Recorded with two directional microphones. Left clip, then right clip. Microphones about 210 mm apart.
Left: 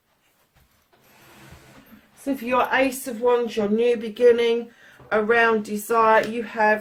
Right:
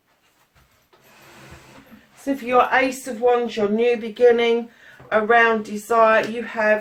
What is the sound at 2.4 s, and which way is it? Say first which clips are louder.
A woman's voice: right 3 dB; 40° left (ahead or behind).